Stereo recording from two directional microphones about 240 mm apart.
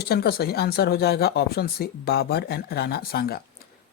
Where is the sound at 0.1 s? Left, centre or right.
Left.